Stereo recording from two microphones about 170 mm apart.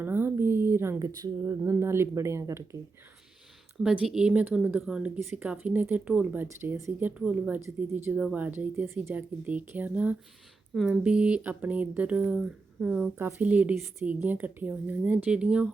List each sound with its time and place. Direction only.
0.0 s speech: 10° right (ahead or behind)
3.8 s speech: 5° right (ahead or behind)